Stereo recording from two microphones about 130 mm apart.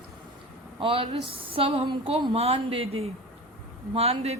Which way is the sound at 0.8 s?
45° right (ahead or behind).